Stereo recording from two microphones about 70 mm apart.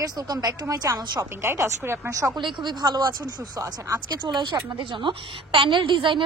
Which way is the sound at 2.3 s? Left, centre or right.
Right.